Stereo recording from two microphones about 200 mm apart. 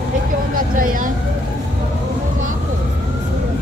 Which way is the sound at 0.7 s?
40° right (ahead or behind).